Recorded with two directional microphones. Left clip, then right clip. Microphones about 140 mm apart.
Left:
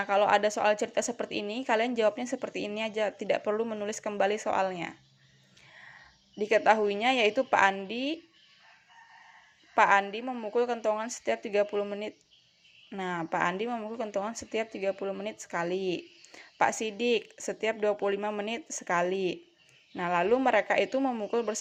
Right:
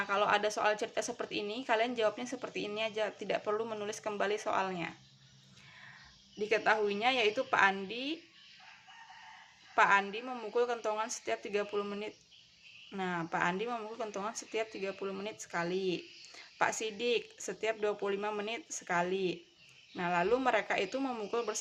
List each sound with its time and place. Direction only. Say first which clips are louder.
0.0 s a woman's voice: left 6 dB; 40° left (ahead or behind)
6.4 s a woman's voice: left 6 dB; 40° left (ahead or behind)
9.7 s a woman's voice: left 4 dB; 40° left (ahead or behind)